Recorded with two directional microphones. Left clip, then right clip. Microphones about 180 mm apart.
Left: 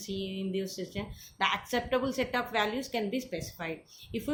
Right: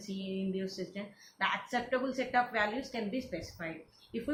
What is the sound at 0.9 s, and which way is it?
Speech, 55° left (ahead or behind).